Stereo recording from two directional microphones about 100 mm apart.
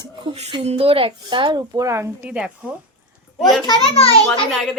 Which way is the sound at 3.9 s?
70° left (ahead or behind).